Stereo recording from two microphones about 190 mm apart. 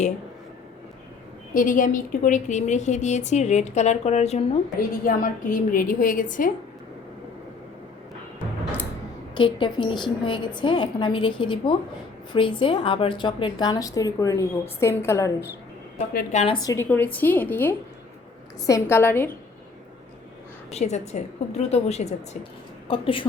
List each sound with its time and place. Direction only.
1.5 s a woman's voice: 45° left (ahead or behind)
5.0 s a woman's voice: 45° left (ahead or behind)
9.3 s a woman's voice: 25° left (ahead or behind)
16.1 s a woman's voice: 35° left (ahead or behind)
16.6 s a woman's voice: 10° left (ahead or behind)
20.7 s a woman's voice: 35° left (ahead or behind)